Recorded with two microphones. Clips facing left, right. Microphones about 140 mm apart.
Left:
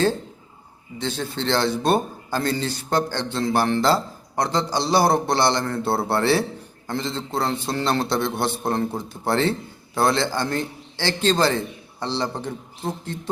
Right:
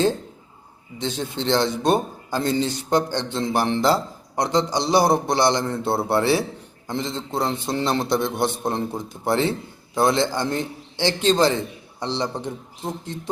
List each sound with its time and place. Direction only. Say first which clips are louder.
0.9 s a man's voice: even; 20° right (ahead or behind)